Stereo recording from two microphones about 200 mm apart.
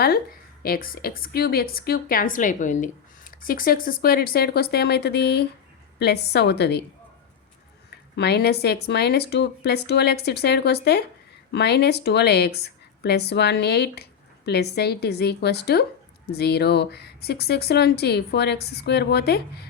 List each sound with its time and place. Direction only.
0.6 s a woman's voice: 45° left (ahead or behind)
8.1 s speech: 55° left (ahead or behind)